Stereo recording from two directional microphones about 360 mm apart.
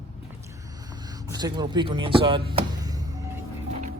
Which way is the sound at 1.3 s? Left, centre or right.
Centre.